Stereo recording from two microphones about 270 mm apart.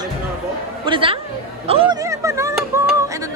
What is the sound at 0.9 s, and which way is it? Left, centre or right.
Speech, centre.